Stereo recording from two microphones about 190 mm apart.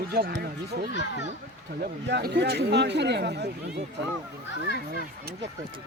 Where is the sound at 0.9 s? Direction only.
65° left (ahead or behind).